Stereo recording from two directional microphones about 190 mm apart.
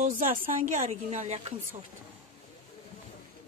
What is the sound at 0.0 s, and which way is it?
A woman's voice, 45° right (ahead or behind).